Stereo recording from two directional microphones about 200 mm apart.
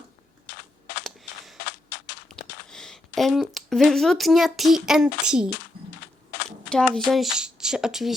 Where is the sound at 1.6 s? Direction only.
60° left (ahead or behind).